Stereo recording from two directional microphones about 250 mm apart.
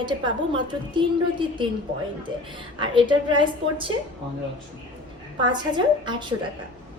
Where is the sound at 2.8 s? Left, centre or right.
Centre.